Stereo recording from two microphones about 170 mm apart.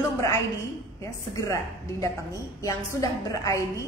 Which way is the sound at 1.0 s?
20° left (ahead or behind).